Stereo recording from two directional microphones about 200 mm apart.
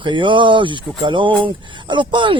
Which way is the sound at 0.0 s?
25° right (ahead or behind).